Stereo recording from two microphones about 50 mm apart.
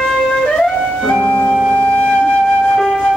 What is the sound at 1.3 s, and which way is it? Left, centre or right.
Flute, left.